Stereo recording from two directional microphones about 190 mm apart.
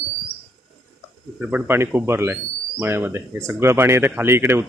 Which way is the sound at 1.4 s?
10° right (ahead or behind).